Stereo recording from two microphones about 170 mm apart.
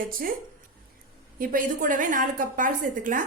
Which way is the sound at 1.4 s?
50° right (ahead or behind).